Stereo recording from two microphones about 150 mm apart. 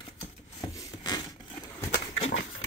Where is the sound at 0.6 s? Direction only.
25° left (ahead or behind).